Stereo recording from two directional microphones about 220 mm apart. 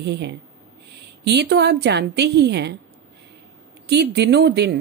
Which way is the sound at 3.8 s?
50° right (ahead or behind).